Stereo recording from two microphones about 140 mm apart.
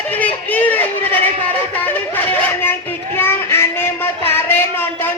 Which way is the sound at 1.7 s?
10° left (ahead or behind).